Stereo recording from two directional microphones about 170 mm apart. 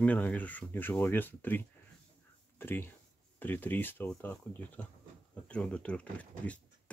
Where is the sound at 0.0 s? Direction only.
10° left (ahead or behind).